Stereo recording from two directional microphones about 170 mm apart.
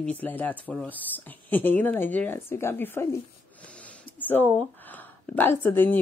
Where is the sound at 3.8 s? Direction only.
10° left (ahead or behind).